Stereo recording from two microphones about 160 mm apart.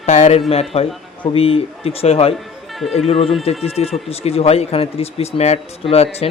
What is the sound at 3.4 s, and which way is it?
Speech, 40° left (ahead or behind).